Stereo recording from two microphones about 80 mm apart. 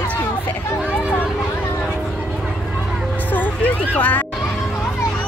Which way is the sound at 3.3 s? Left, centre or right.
Left.